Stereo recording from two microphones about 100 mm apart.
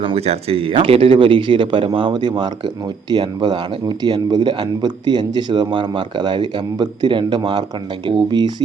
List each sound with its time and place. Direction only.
0.0 s speech: 80° right; by 8.5 s 45° right (ahead or behind)